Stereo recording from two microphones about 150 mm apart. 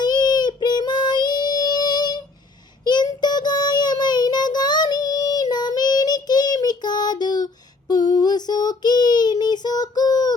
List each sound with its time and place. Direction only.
0.0 s child singing: 30° left (ahead or behind)